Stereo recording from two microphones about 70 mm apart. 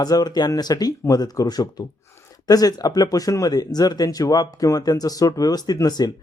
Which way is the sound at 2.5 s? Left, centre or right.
Left.